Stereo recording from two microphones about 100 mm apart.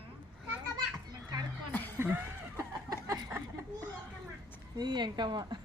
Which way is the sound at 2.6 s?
30° right (ahead or behind).